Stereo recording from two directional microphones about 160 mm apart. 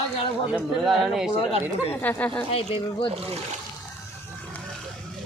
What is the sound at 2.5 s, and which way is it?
Speech, 40° left (ahead or behind).